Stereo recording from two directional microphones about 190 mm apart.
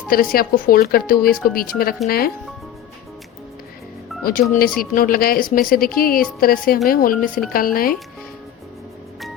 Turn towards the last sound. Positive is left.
turn(degrees=50)  # may be behind; listen again after turning